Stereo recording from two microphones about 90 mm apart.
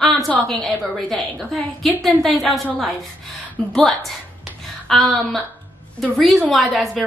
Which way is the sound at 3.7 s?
5° left (ahead or behind).